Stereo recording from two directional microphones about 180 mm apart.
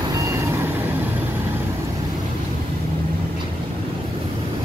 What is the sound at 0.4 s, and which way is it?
Reversing beeps, 15° right (ahead or behind).